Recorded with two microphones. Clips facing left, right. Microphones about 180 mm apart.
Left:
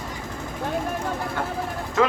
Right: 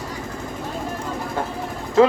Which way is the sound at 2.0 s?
30° right (ahead or behind).